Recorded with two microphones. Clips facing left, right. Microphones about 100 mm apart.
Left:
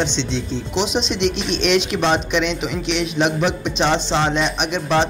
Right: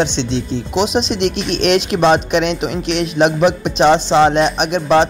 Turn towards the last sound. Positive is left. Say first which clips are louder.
# right 6 dB
turn(degrees=-45)  # may be behind; listen again after turning